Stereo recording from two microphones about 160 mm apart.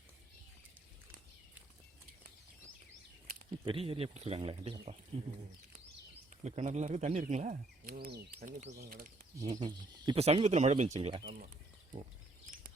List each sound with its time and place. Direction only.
3.6 s speech: 35° right (ahead or behind)
6.4 s speech: 45° right (ahead or behind)
7.9 s speech: 75° right (ahead or behind)
8.7 s speech: 70° right (ahead or behind)
9.4 s speech: 25° right (ahead or behind)
10.2 s speech: 40° right (ahead or behind)